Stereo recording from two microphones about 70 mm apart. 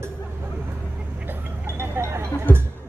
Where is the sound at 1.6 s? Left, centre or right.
Right.